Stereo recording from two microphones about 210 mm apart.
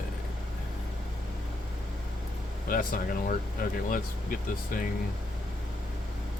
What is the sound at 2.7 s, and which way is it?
Speech, 40° left (ahead or behind).